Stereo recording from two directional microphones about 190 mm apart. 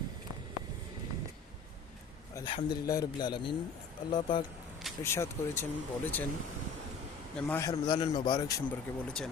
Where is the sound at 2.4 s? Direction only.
25° left (ahead or behind).